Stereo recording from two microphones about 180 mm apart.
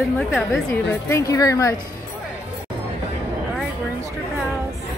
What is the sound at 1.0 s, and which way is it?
Speech, 15° left (ahead or behind).